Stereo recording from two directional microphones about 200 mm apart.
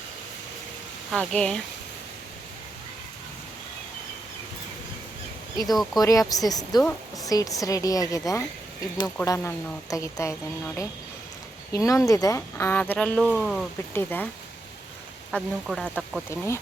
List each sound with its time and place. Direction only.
1.1 s speech: 5° left (ahead or behind)
5.6 s speech: centre (ahead or behind)
6.0 s a woman's voice: 15° left (ahead or behind)
11.7 s speech: 15° left (ahead or behind)
15.3 s speech: centre (ahead or behind)